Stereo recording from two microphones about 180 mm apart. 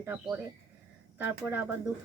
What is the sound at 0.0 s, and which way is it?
Speech, 10° right (ahead or behind).